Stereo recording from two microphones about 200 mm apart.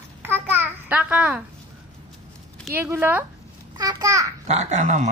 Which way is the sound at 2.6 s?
10° right (ahead or behind).